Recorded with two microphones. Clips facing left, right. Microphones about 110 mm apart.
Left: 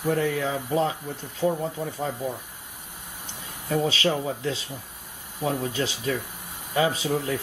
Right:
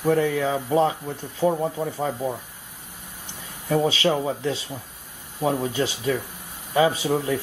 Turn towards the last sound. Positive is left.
turn(degrees=-20)  # may be behind; listen again after turning